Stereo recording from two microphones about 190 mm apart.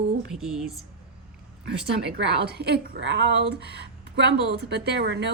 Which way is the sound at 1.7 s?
60° right (ahead or behind).